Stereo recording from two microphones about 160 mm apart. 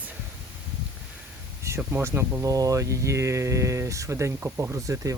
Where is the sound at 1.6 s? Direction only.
15° right (ahead or behind).